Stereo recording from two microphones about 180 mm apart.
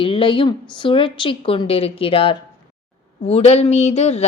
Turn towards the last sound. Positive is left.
turn(degrees=40)  # may be behind; listen again after turning